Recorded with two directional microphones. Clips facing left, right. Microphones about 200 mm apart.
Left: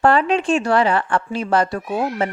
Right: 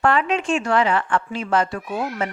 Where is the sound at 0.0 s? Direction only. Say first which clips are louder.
Left 4 dB; 35° left (ahead or behind).